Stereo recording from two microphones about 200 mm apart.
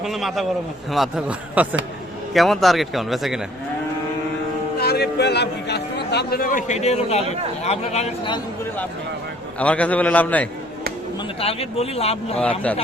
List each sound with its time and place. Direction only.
0.0 s speech: centre (ahead or behind)
4.8 s a man's voice: 55° left (ahead or behind); by 8.4 s 30° left (ahead or behind)
9.6 s a man's voice: 5° left (ahead or behind)
11.3 s a man's voice: 30° left (ahead or behind)
12.4 s a man's voice: 5° left (ahead or behind)